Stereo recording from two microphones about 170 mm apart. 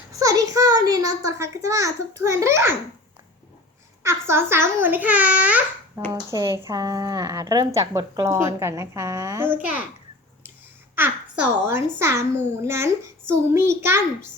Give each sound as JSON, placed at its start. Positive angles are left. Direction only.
{"t": 0.1, "sound": "a child's voice", "side_deg": -20}
{"t": 4.0, "sound": "a child's voice", "side_deg": -15}
{"t": 6.1, "sound": "speech", "side_deg": -20}
{"t": 10.9, "sound": "a child's voice", "side_deg": -10}